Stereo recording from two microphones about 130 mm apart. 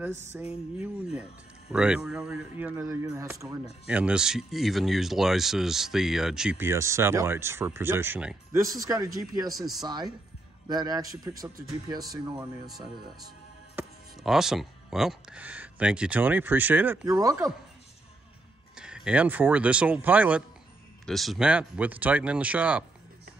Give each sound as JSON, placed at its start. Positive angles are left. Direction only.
{"t": 0.5, "sound": "speech", "side_deg": -10}
{"t": 3.8, "sound": "speech", "side_deg": -10}
{"t": 6.6, "sound": "speech", "side_deg": -20}
{"t": 8.5, "sound": "speech", "side_deg": -25}
{"t": 14.2, "sound": "speech", "side_deg": -5}
{"t": 17.0, "sound": "speech", "side_deg": -25}
{"t": 18.8, "sound": "speech", "side_deg": -5}
{"t": 21.0, "sound": "speech", "side_deg": 0}